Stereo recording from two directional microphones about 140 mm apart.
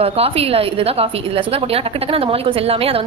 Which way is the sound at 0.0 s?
45° right (ahead or behind).